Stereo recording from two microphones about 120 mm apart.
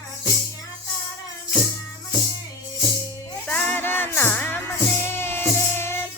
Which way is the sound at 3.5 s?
15° left (ahead or behind).